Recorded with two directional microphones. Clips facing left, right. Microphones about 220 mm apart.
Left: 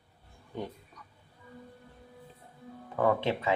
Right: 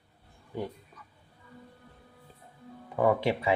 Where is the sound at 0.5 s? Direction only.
10° right (ahead or behind).